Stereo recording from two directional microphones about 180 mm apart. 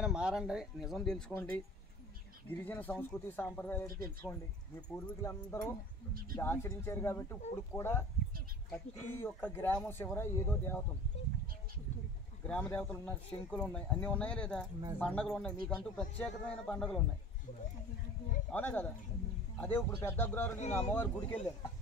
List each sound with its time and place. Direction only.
0.0 s speech: 5° right (ahead or behind)
2.6 s speech: 10° left (ahead or behind)
12.4 s speech: 5° left (ahead or behind)
18.5 s speech: 10° left (ahead or behind)
20.5 s speech: 40° left (ahead or behind)
20.9 s speech: 10° left (ahead or behind)